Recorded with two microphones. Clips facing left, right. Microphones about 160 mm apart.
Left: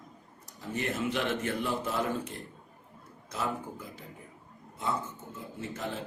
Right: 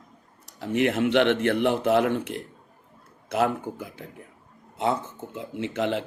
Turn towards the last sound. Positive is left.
turn(degrees=-85)